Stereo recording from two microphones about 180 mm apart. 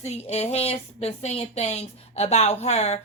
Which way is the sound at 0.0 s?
35° left (ahead or behind).